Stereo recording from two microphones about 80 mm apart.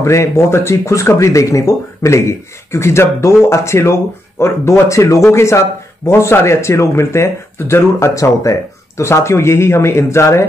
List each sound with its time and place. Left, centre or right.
0.0 s speech: left